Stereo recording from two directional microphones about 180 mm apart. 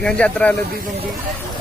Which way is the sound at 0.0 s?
5° left (ahead or behind).